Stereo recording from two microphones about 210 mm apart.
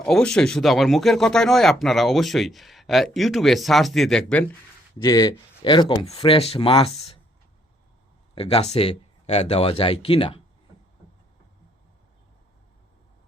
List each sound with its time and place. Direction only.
0.0 s speech: 5° left (ahead or behind)
5.0 s speech: 20° left (ahead or behind)
8.4 s speech: 30° left (ahead or behind)